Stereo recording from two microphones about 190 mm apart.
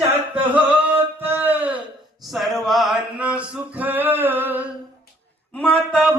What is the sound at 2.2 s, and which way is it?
Male singing, centre (ahead or behind).